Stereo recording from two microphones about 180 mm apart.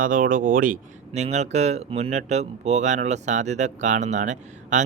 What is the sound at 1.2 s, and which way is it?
Speech, 40° right (ahead or behind).